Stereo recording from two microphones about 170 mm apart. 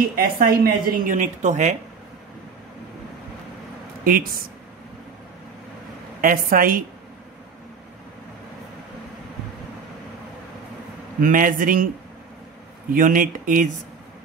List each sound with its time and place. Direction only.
0.1 s speech: 60° right (ahead or behind)
4.0 s speech: 55° right (ahead or behind)
6.2 s a woman's voice: 55° right (ahead or behind)
11.1 s speech: 55° right (ahead or behind)
12.9 s speech: 55° right (ahead or behind)